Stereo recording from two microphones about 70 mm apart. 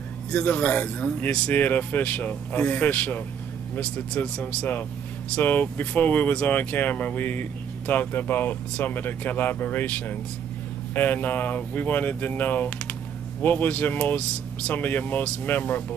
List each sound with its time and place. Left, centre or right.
0.3 s speech: centre